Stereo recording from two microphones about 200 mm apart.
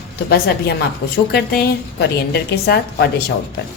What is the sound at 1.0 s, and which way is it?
A woman's voice, 55° left (ahead or behind).